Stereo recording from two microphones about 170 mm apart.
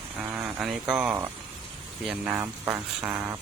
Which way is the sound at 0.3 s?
5° right (ahead or behind).